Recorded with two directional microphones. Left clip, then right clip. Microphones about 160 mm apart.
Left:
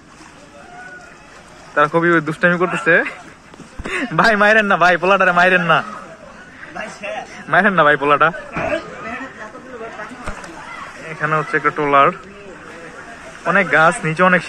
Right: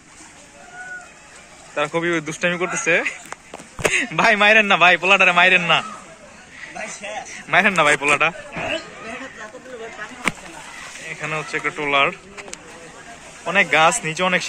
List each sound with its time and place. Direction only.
1.8 s a man's voice: 25° right (ahead or behind)
7.4 s a man's voice: 20° right (ahead or behind)
11.1 s speech: 20° right (ahead or behind)
13.4 s a man's voice: 25° right (ahead or behind)